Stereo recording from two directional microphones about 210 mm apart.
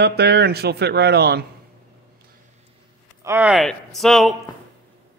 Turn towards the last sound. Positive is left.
turn(degrees=0)  # may be behind; listen again after turning